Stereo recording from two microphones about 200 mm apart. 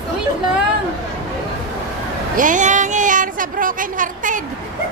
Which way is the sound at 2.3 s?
40° right (ahead or behind).